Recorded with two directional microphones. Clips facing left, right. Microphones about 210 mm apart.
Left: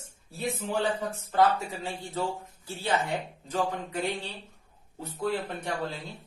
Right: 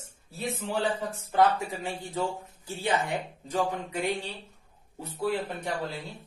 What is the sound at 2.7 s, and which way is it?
Speech, 15° right (ahead or behind).